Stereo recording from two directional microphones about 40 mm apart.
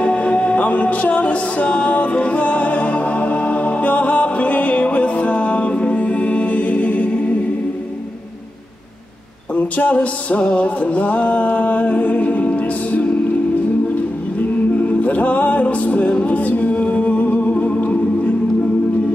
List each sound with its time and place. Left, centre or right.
0.0 s music: left
9.6 s music: left
14.4 s music: left